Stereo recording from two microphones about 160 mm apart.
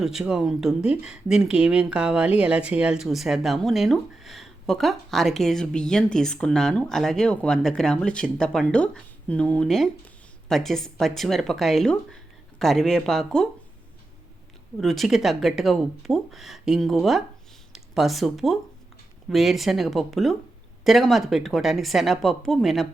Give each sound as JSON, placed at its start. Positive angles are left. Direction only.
{"t": 0.0, "sound": "speech", "side_deg": -5}
{"t": 14.8, "sound": "speech", "side_deg": 0}